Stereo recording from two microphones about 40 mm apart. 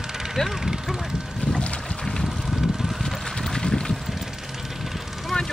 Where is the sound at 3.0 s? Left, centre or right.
Centre.